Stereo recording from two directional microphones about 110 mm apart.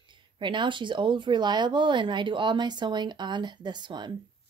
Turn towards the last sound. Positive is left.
turn(degrees=-45)  # may be behind; listen again after turning